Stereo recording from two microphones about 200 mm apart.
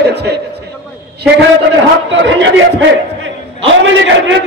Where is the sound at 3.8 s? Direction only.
70° right (ahead or behind).